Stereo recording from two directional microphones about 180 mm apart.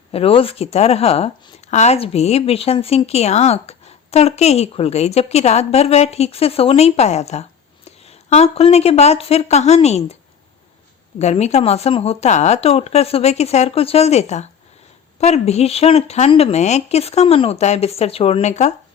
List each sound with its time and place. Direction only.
0.1 s speech: 30° left (ahead or behind)
11.2 s speech: 40° left (ahead or behind)